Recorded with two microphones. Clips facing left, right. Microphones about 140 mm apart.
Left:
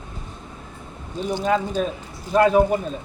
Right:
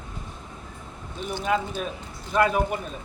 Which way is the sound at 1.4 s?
40° left (ahead or behind).